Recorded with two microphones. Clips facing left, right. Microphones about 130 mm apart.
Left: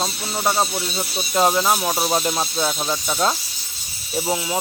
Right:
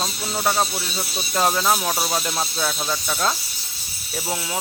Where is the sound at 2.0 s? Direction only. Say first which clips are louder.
Left 4 dB; 25° left (ahead or behind).